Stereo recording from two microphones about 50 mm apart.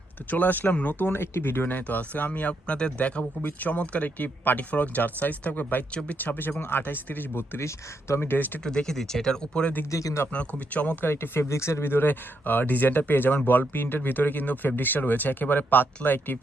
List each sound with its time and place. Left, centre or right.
0.3 s speech: left
1.0 s speech: left
5.9 s speech: left
6.1 s speech: left
7.6 s speech: left
8.3 s speech: left
8.6 s speech: centre
9.9 s speech: left
10.3 s speech: left
11.0 s speech: left
11.9 s speech: left